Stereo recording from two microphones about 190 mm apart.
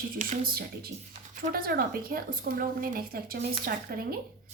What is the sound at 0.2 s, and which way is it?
A woman's voice, 50° right (ahead or behind).